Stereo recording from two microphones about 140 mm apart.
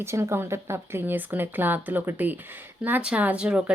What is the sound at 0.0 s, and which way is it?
A woman's voice, 20° right (ahead or behind).